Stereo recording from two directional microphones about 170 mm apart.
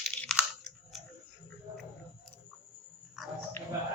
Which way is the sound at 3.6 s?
15° left (ahead or behind).